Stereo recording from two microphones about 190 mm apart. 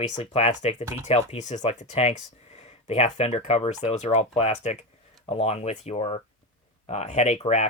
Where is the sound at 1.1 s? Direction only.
35° left (ahead or behind).